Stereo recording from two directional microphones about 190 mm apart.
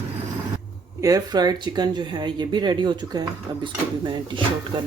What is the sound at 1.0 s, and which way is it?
Speech, 20° right (ahead or behind).